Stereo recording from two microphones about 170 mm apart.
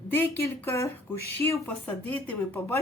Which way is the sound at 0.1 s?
15° left (ahead or behind).